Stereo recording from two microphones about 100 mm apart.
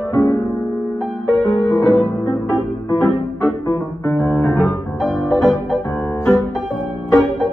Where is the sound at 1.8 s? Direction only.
5° left (ahead or behind).